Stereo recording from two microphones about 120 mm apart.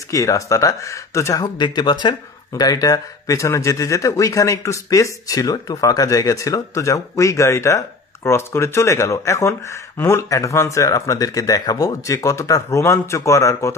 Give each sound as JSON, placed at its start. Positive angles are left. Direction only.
{"t": 0.1, "sound": "speech", "side_deg": 25}